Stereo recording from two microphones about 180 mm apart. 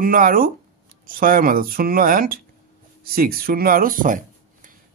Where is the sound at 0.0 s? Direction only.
50° right (ahead or behind).